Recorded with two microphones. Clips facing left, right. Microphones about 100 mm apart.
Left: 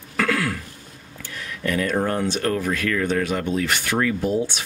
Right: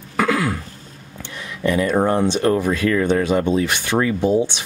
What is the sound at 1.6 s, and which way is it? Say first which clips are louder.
Speech: right 5 dB; 20° right (ahead or behind).